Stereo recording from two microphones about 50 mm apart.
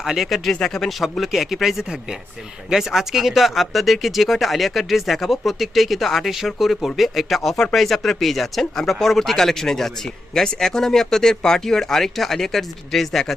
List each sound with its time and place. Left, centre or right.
0.0 s speech: centre